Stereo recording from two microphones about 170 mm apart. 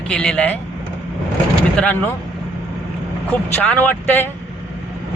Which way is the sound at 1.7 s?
10° left (ahead or behind).